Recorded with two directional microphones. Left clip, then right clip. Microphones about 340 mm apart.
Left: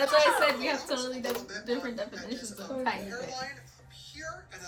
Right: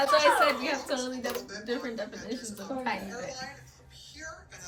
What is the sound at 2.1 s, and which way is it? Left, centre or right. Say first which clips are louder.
Speech: right 1 dB; left.